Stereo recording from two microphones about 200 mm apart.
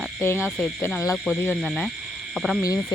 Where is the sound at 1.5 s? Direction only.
Centre (ahead or behind).